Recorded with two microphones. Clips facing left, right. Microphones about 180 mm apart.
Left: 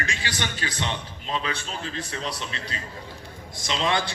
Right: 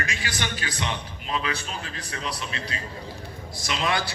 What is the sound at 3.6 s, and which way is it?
Speech, 25° left (ahead or behind).